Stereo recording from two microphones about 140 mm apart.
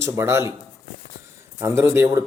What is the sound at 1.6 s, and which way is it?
Speech, 20° right (ahead or behind).